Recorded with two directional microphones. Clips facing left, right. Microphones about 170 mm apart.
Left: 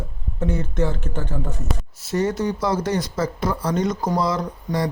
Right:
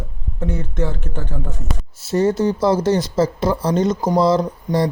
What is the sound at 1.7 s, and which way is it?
Speech, centre (ahead or behind).